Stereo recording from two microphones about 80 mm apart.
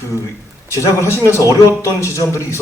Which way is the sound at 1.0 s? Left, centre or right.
Left.